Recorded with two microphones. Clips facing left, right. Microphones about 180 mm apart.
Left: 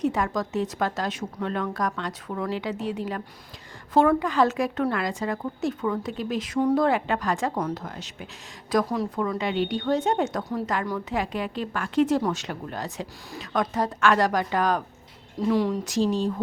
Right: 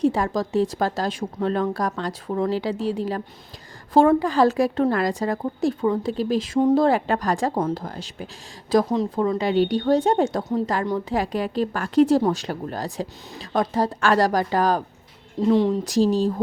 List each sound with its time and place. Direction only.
0.0 s speech: 30° right (ahead or behind)